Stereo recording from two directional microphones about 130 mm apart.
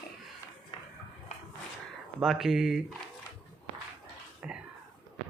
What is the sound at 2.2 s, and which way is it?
Speech, 5° right (ahead or behind).